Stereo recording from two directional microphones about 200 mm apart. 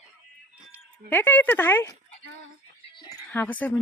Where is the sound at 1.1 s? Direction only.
10° left (ahead or behind).